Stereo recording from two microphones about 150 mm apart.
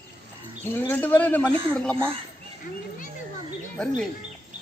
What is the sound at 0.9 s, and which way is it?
Speech, 10° left (ahead or behind).